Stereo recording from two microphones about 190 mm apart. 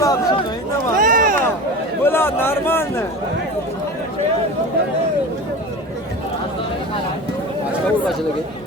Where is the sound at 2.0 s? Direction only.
10° left (ahead or behind).